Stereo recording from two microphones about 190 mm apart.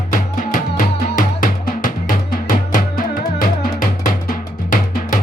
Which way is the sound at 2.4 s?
45° left (ahead or behind).